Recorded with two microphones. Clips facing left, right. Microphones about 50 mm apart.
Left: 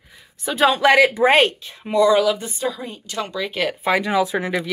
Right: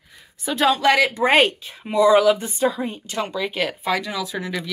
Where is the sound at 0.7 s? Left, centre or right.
Centre.